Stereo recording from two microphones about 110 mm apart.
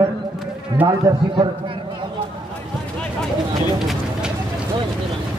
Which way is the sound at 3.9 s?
5° right (ahead or behind).